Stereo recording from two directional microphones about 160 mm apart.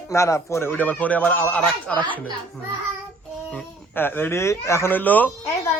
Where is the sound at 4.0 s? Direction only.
10° left (ahead or behind).